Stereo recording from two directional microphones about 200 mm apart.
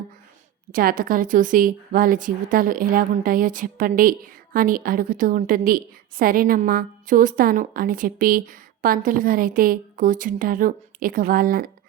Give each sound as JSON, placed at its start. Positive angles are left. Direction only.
{"t": 0.7, "sound": "a woman's voice", "side_deg": -45}